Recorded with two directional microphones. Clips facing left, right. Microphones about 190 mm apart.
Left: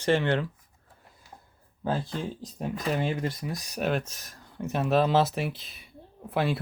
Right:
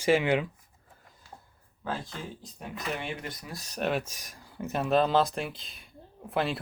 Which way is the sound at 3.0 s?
30° left (ahead or behind).